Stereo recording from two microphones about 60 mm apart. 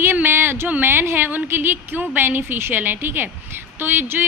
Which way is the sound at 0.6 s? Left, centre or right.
Right.